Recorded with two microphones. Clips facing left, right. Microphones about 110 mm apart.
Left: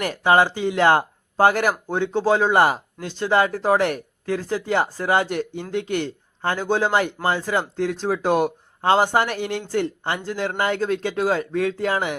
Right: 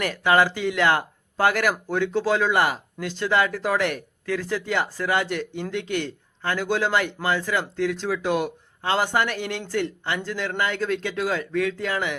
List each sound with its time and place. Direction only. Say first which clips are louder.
0.0 s speech: left 2 dB; 35° left (ahead or behind)